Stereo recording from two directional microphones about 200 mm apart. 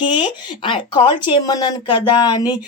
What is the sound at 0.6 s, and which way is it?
Speech, 25° left (ahead or behind).